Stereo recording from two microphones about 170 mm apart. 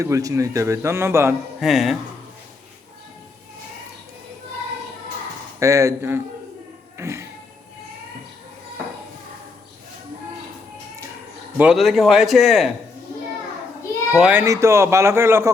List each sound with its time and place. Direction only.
0.0 s speech: 20° right (ahead or behind)
1.6 s a man's voice: centre (ahead or behind)
5.5 s speech: 20° right (ahead or behind)
6.9 s music: 15° right (ahead or behind)
11.5 s a man's voice: 5° right (ahead or behind)
14.1 s speech: 5° right (ahead or behind)